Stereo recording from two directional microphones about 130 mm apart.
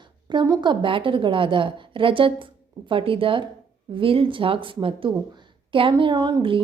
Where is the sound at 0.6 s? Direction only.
40° right (ahead or behind).